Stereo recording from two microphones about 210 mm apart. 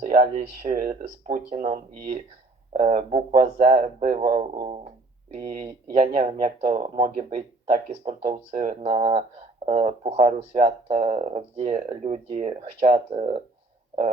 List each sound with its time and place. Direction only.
0.1 s speech: 35° right (ahead or behind)
4.5 s speech: 25° right (ahead or behind)
6.1 s speech: 40° right (ahead or behind)